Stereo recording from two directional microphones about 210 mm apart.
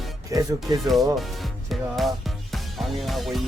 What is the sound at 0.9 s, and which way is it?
Speech, centre (ahead or behind).